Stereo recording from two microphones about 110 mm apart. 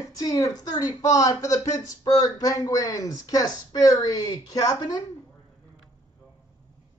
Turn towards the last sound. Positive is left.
turn(degrees=35)  # may be behind; listen again after turning